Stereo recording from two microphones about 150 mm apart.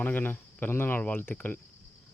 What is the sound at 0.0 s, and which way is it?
Speech, 10° left (ahead or behind).